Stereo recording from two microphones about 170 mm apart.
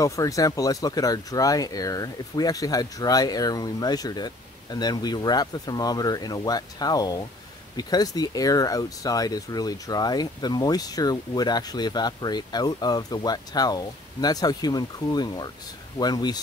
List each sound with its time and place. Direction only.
0.0 s speech: 20° left (ahead or behind)